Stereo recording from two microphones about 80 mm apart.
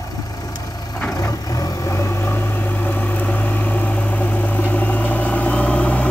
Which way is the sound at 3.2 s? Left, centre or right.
Left.